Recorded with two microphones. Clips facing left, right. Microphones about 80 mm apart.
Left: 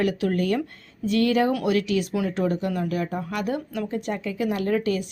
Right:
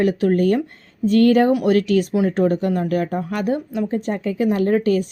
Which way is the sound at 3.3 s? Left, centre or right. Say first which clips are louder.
Right 5 dB; right.